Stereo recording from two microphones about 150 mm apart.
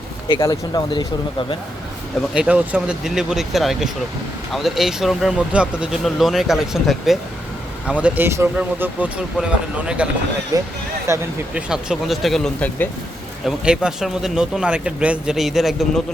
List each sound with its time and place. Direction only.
0.3 s speech: 25° left (ahead or behind)
2.3 s speech: 5° right (ahead or behind)
10.5 s speech: 25° right (ahead or behind)
11.5 s speech: 5° right (ahead or behind)
13.4 s speech: 5° right (ahead or behind)